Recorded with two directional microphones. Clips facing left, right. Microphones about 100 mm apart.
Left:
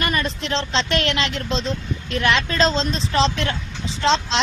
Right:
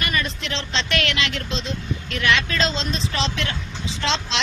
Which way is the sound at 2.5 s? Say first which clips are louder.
Left 4 dB; 35° left (ahead or behind).